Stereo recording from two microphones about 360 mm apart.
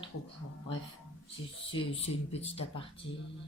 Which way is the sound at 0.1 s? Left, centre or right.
Left.